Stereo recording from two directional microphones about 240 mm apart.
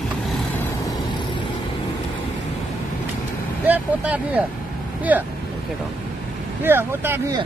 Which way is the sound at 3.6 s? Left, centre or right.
Centre.